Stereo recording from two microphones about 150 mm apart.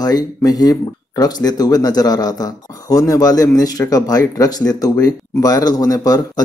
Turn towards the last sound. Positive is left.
turn(degrees=25)  # may be behind; listen again after turning